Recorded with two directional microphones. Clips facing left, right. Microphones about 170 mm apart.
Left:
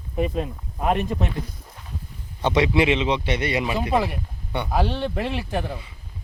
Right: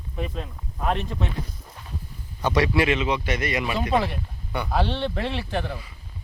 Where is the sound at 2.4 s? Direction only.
20° left (ahead or behind).